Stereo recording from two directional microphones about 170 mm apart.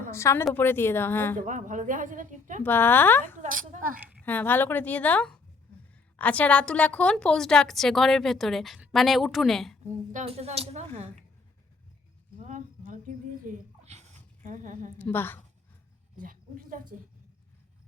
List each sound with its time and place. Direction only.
0.1 s a woman's voice: 15° left (ahead or behind)
1.4 s a woman's voice: 50° right (ahead or behind)
2.6 s a woman's voice: 10° left (ahead or behind)
3.4 s a woman's voice: 50° right (ahead or behind)
4.3 s a woman's voice: 10° left (ahead or behind)
10.1 s speech: 40° right (ahead or behind)
12.4 s a sound: 45° right (ahead or behind)
14.9 s a woman's voice: 10° left (ahead or behind)
16.1 s a sound: 55° right (ahead or behind)